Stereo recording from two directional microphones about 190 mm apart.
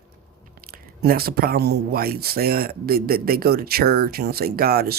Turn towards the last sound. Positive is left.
turn(degrees=-55)  # may be behind; listen again after turning